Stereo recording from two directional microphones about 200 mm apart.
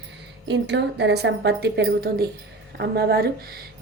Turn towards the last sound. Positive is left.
turn(degrees=-50)  # may be behind; listen again after turning